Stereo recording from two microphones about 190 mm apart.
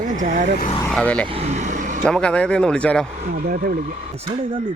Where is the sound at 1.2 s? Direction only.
30° right (ahead or behind).